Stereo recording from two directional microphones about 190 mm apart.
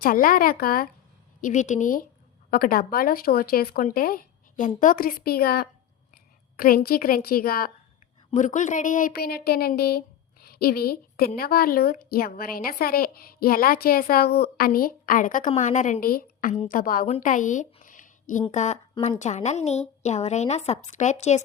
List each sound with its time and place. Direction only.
0.0 s a woman's voice: 50° left (ahead or behind)
8.3 s a woman's voice: 40° left (ahead or behind)